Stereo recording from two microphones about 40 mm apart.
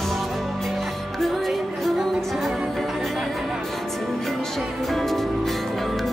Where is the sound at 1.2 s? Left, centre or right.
Centre.